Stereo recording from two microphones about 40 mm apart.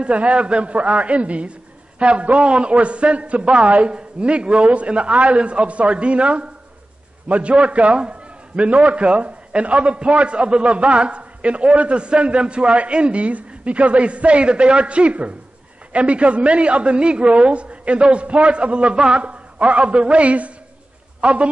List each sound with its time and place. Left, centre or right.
0.0 s a man's voice: right